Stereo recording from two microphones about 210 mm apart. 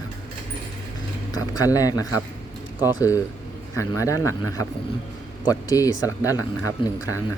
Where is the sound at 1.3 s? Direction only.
15° left (ahead or behind).